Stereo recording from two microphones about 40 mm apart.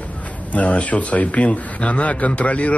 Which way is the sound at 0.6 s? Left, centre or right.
Left.